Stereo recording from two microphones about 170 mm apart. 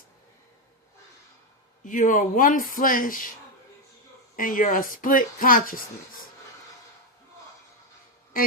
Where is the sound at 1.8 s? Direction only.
50° left (ahead or behind).